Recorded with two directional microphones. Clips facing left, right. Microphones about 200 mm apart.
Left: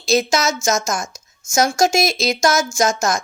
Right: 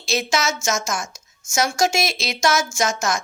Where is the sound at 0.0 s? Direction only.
40° left (ahead or behind).